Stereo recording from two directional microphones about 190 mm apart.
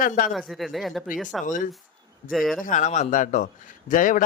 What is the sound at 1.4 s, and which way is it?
Speech, 45° left (ahead or behind).